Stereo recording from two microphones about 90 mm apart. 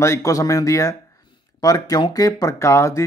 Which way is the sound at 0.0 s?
35° left (ahead or behind).